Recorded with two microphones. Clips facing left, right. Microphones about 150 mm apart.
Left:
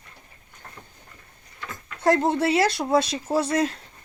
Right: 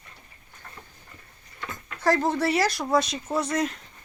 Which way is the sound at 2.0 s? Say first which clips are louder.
Left 3 dB; 25° left (ahead or behind).